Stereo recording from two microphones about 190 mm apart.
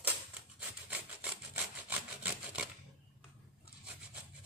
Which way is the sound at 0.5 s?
5° right (ahead or behind).